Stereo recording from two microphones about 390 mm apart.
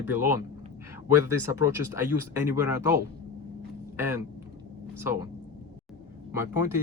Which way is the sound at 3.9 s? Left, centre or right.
Centre.